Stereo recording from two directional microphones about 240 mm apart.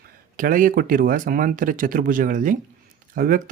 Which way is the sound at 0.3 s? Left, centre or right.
Right.